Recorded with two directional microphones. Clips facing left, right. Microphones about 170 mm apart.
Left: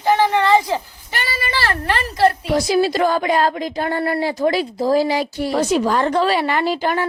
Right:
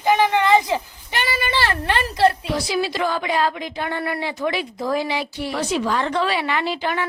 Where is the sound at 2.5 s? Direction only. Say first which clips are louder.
Left 6 dB; 45° left (ahead or behind).